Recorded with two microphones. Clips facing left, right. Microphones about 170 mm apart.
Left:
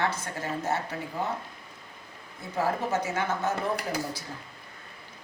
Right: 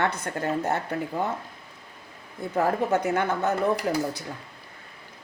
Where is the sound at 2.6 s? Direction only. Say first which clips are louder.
Right 4 dB; 60° right (ahead or behind).